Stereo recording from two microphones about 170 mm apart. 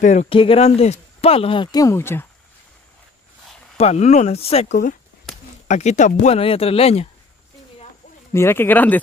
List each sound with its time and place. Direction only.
0.0 s speech: 40° left (ahead or behind); by 2.2 s 15° left (ahead or behind)
3.7 s speech: 40° left (ahead or behind)
8.3 s speech: 15° left (ahead or behind)